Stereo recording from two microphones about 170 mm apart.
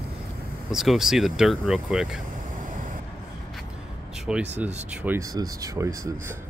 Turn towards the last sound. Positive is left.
turn(degrees=-20)  # may be behind; listen again after turning